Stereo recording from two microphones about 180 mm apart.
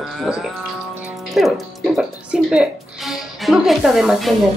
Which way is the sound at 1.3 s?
Centre (ahead or behind).